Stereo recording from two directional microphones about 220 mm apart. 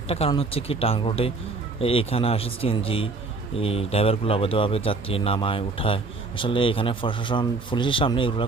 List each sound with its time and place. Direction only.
0.1 s a man's voice: 25° left (ahead or behind)